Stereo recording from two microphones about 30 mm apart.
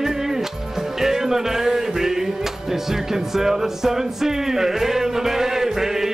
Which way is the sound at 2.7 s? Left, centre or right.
Centre.